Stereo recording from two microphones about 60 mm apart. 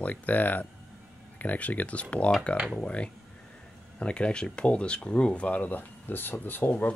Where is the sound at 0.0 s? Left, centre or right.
Left.